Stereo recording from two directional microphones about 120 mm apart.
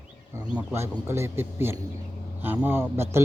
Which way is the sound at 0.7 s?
20° right (ahead or behind).